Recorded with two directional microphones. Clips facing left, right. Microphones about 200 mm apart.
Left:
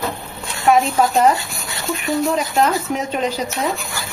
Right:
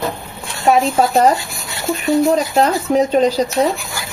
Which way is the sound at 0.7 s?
40° right (ahead or behind).